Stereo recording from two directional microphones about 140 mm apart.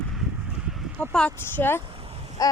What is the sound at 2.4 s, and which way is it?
Speech, 25° left (ahead or behind).